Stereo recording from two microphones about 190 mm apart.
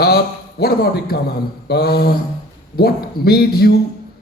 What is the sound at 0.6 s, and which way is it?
A man's voice, 55° left (ahead or behind).